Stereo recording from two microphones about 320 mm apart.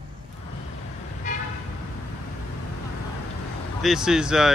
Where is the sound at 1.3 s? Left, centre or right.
Left.